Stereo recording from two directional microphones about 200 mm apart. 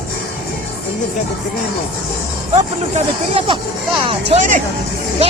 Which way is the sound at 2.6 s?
30° right (ahead or behind).